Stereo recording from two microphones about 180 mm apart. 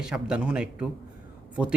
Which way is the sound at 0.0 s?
5° right (ahead or behind).